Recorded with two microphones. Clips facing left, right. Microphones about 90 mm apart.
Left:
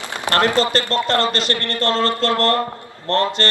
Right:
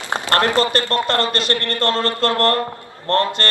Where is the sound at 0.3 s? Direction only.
20° left (ahead or behind).